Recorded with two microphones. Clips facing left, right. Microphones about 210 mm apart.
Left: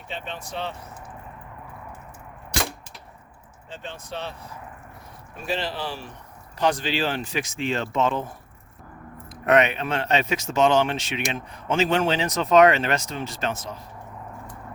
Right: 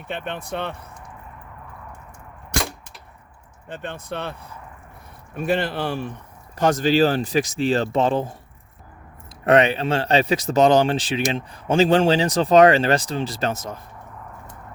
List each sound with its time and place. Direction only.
0.1 s speech: 60° right (ahead or behind)
3.7 s speech: 55° right (ahead or behind)
6.6 s speech: 45° right (ahead or behind)